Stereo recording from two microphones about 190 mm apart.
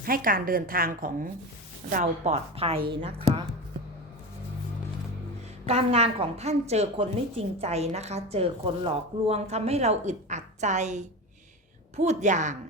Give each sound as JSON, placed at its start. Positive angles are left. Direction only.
{"t": 0.0, "sound": "a woman's voice", "side_deg": -50}
{"t": 5.6, "sound": "a woman's voice", "side_deg": -35}